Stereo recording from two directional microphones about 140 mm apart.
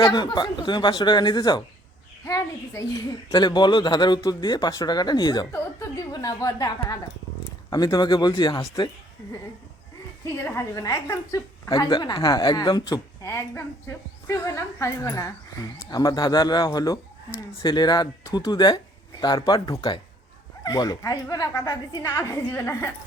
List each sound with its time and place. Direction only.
0.0 s a woman's voice: 25° left (ahead or behind)
10.3 s a woman's voice: 20° left (ahead or behind)
13.2 s a woman's voice: 20° left (ahead or behind)